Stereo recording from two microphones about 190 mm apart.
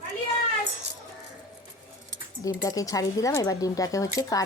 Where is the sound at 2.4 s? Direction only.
20° left (ahead or behind).